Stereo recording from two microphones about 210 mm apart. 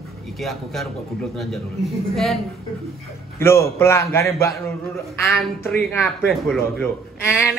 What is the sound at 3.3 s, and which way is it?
A man's voice, 10° left (ahead or behind).